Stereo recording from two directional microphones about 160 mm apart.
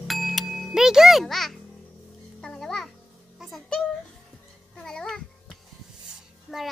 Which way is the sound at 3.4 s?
Centre (ahead or behind).